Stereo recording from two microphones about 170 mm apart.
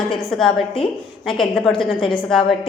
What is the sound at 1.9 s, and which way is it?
Speech, 30° left (ahead or behind).